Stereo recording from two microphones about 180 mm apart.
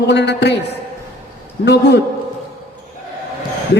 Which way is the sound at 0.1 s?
70° left (ahead or behind).